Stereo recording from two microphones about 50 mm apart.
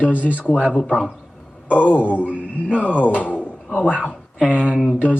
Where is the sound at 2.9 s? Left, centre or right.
Left.